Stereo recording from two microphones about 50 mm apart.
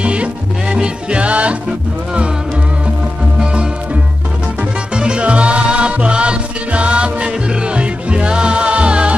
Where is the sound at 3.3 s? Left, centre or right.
Centre.